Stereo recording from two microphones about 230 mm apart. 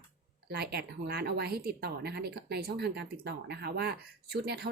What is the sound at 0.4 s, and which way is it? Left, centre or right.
Speech, right.